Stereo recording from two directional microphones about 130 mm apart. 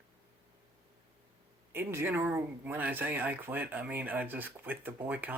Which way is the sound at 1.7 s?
20° right (ahead or behind).